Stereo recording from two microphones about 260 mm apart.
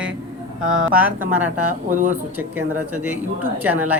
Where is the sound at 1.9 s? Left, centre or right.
Right.